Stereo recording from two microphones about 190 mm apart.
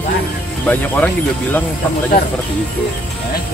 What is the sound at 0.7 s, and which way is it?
Speech, 10° left (ahead or behind).